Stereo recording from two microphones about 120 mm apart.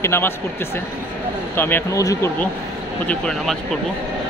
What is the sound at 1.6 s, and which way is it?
Speech, 20° left (ahead or behind).